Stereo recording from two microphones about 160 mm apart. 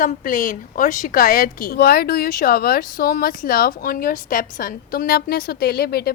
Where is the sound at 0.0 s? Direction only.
55° left (ahead or behind).